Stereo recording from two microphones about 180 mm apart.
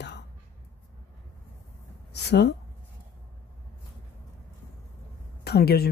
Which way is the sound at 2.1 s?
70° left (ahead or behind).